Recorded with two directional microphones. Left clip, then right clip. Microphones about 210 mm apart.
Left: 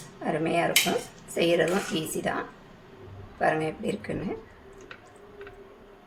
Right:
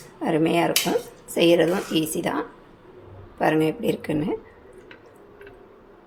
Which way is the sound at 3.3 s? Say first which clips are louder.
Right 5 dB; 40° right (ahead or behind).